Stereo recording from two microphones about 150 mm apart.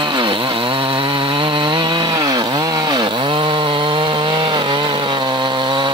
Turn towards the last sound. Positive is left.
turn(degrees=-30)  # may be behind; listen again after turning